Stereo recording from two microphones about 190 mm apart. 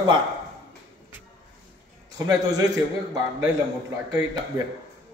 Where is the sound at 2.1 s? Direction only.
20° right (ahead or behind).